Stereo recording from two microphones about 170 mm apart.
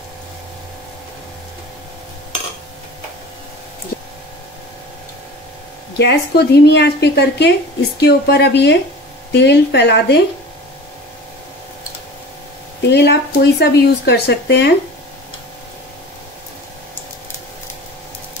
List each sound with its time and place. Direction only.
5.9 s a woman's voice: 75° left (ahead or behind)
12.8 s speech: 90° left